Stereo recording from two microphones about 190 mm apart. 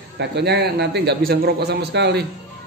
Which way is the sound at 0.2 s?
60° right (ahead or behind).